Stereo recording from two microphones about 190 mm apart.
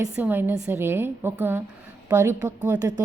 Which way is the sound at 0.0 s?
10° right (ahead or behind).